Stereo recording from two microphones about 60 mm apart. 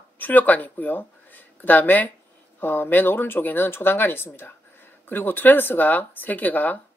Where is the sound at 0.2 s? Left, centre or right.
Left.